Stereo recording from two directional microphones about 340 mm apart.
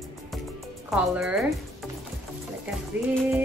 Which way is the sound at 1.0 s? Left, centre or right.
Centre.